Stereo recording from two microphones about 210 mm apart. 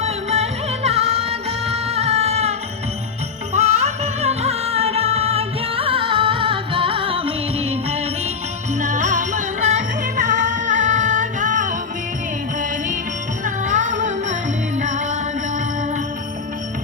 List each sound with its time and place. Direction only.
0.0 s music: 30° right (ahead or behind)
13.4 s music: 35° right (ahead or behind)